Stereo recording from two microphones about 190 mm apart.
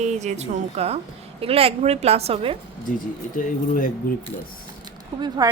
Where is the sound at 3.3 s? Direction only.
45° left (ahead or behind).